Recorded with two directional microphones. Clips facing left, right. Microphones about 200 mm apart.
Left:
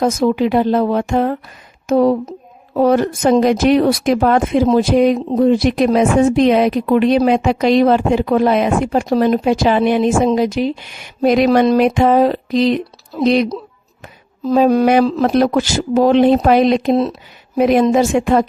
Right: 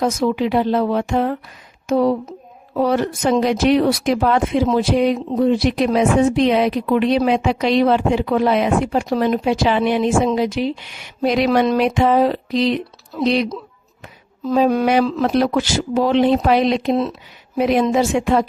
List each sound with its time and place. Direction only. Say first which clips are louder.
0.0 s speech: left 4 dB; 45° left (ahead or behind)
17.6 s speech: left 4 dB; 50° left (ahead or behind)